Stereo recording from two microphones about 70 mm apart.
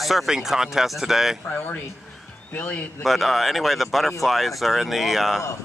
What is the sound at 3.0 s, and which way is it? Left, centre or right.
Speech, centre.